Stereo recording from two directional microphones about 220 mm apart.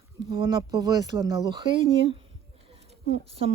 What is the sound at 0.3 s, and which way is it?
Speech, 20° right (ahead or behind).